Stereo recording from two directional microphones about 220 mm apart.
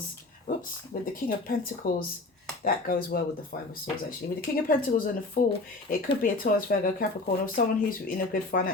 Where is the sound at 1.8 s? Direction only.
40° left (ahead or behind).